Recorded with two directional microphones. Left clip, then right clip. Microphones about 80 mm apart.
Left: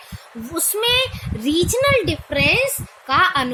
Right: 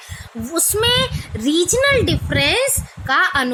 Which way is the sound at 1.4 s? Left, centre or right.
Right.